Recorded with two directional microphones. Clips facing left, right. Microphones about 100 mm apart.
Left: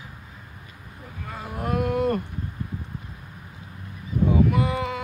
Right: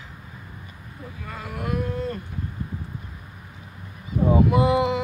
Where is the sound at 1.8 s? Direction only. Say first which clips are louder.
Left 5 dB; 70° left (ahead or behind).